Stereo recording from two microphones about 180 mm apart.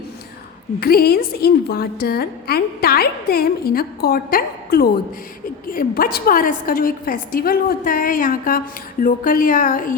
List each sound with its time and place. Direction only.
0.8 s a woman's voice: 60° left (ahead or behind)